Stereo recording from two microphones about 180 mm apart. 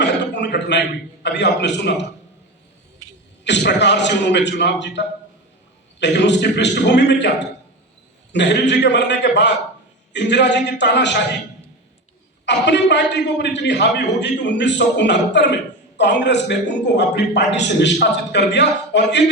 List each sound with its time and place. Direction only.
0.0 s a sound: 75° left (ahead or behind)
1.2 s a man's voice: 75° left (ahead or behind)
3.4 s a man's voice: 75° left (ahead or behind)
12.5 s a man's voice: 75° left (ahead or behind)